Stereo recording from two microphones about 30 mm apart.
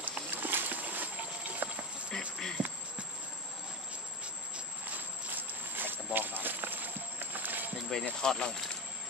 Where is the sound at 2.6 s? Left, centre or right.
Right.